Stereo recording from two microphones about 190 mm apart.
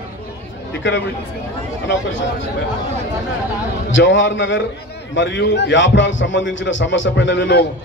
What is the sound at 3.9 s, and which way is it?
A man's voice, 80° left.